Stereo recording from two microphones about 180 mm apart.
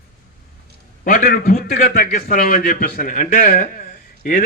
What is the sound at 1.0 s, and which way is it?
A man's voice, 50° left (ahead or behind).